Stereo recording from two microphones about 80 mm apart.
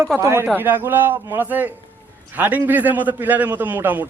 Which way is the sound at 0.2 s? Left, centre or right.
Right.